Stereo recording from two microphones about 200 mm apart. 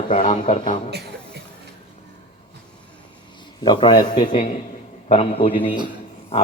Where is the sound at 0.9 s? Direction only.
55° right (ahead or behind).